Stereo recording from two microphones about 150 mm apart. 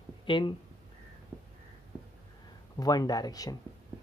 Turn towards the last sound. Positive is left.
turn(degrees=25)  # may be behind; listen again after turning